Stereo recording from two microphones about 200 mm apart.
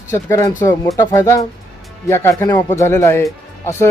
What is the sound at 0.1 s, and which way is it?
Speech, 15° left (ahead or behind).